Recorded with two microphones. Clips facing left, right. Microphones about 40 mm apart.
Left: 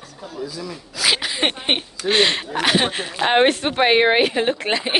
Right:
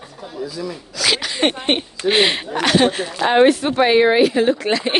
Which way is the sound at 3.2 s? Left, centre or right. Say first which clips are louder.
Right 3 dB; left.